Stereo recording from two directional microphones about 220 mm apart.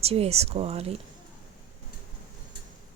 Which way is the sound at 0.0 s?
30° right (ahead or behind).